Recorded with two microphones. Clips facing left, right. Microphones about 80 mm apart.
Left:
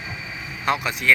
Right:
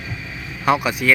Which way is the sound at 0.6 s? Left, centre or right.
Centre.